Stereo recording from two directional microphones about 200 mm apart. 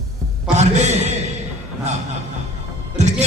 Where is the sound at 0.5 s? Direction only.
35° right (ahead or behind).